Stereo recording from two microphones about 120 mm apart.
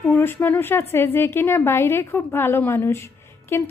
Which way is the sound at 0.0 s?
15° left (ahead or behind).